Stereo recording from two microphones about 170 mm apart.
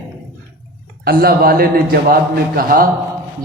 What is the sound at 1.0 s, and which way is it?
A man's voice, 65° right (ahead or behind).